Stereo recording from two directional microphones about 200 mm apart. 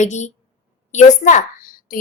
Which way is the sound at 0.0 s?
35° left (ahead or behind).